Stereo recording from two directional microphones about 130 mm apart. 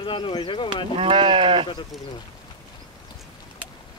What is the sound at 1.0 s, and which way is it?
Speech, 35° right (ahead or behind).